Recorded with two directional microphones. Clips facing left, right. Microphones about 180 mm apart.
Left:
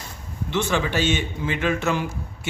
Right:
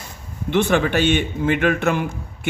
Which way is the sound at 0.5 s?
60° right (ahead or behind).